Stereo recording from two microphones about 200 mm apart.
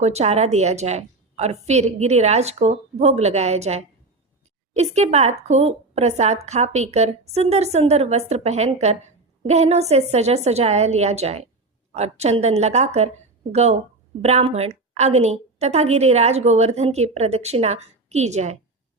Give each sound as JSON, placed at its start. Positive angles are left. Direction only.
{"t": 0.0, "sound": "a woman's voice", "side_deg": -35}